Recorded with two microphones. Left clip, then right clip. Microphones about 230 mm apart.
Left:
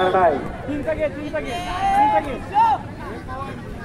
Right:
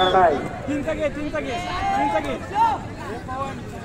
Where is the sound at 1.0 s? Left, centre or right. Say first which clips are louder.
Left 1 dB; right.